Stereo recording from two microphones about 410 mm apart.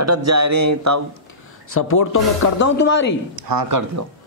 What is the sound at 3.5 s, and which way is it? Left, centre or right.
Speech, right.